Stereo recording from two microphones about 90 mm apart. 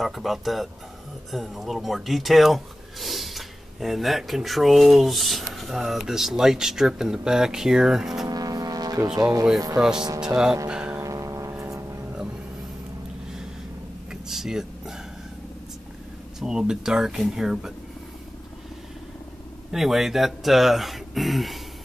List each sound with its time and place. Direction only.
0.0 s speech: centre (ahead or behind)
8.3 s foghorn: 45° right (ahead or behind)
9.2 s speech: 45° right (ahead or behind)
10.2 s music: 5° right (ahead or behind)
11.0 s a sound: 40° right (ahead or behind)
14.3 s a sound: 5° right (ahead or behind)
16.3 s speech: 10° right (ahead or behind)
19.7 s speech: 5° right (ahead or behind)